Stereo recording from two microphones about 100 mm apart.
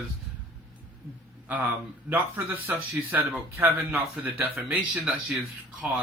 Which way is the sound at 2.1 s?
15° right (ahead or behind).